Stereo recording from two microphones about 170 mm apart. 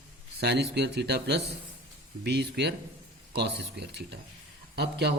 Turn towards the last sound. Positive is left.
turn(degrees=-75)  # may be behind; listen again after turning